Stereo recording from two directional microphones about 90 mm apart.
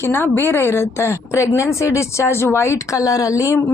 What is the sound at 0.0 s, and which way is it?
A woman's voice, 25° left (ahead or behind).